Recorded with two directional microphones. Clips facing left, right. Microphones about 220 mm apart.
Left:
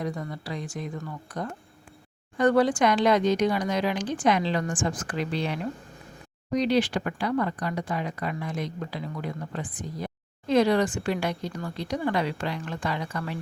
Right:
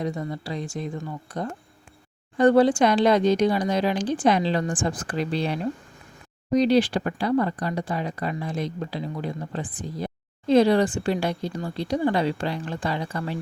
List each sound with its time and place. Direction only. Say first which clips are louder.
0.0 s speech: right 3 dB; 25° right (ahead or behind)